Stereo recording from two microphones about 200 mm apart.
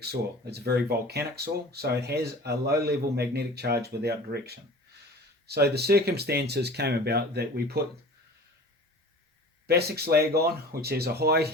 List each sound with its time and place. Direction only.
0.0 s a man's voice: 55° right (ahead or behind)
9.6 s a man's voice: 55° right (ahead or behind)